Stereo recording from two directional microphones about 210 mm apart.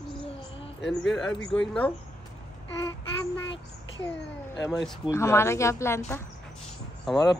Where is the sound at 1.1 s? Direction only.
65° left (ahead or behind).